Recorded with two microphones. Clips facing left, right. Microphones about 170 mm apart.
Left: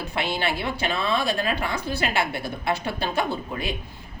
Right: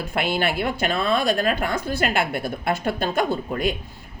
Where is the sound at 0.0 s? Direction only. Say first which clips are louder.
Right 3 dB; 50° right (ahead or behind).